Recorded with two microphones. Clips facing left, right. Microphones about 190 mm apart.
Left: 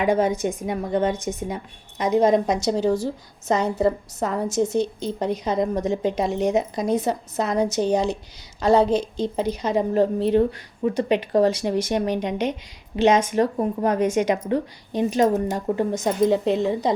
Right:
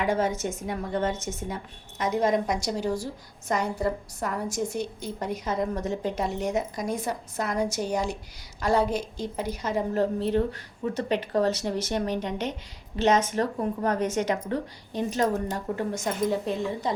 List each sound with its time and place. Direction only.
0.0 s a woman's voice: 15° left (ahead or behind)
16.3 s a woman's voice: 90° left